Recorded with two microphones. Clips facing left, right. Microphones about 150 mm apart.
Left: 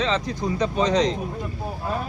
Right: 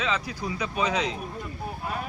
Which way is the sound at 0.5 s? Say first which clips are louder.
Left 9 dB; 30° left (ahead or behind).